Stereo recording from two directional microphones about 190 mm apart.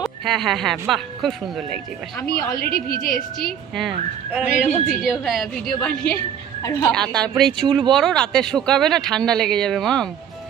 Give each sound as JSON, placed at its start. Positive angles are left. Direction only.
{"t": 0.0, "sound": "speech", "side_deg": 0}
{"t": 2.2, "sound": "a woman's voice", "side_deg": 50}
{"t": 3.8, "sound": "speech", "side_deg": -5}
{"t": 6.6, "sound": "a woman's voice", "side_deg": 15}
{"t": 6.9, "sound": "speech", "side_deg": 5}